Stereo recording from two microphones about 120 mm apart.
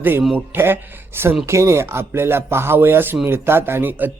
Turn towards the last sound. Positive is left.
turn(degrees=-15)  # may be behind; listen again after turning